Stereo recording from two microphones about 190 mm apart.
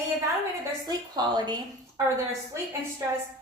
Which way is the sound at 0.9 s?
20° right (ahead or behind).